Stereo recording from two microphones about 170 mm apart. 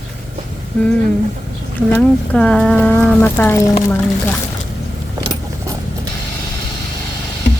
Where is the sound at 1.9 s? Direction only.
5° left (ahead or behind).